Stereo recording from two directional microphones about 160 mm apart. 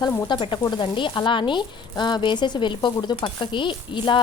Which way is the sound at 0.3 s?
30° left (ahead or behind).